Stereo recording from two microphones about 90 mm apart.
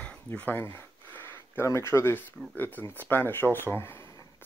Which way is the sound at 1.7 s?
30° left (ahead or behind).